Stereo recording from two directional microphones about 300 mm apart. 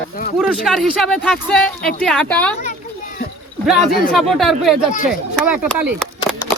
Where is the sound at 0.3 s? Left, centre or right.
Centre.